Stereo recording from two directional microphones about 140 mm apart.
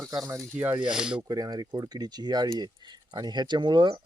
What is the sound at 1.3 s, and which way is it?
Speech, 25° right (ahead or behind).